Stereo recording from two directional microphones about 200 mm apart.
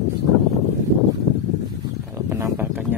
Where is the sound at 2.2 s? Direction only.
15° right (ahead or behind).